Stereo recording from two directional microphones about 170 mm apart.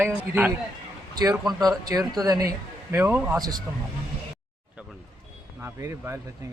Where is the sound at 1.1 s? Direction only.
20° right (ahead or behind).